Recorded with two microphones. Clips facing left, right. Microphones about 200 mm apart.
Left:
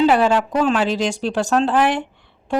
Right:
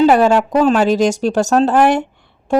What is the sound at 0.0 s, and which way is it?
Speech, 45° right (ahead or behind).